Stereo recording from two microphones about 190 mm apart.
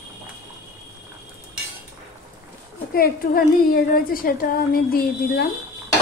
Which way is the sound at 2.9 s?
50° left (ahead or behind).